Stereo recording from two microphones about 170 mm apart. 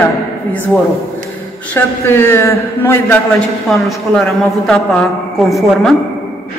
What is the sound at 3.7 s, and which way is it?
A man's voice, centre (ahead or behind).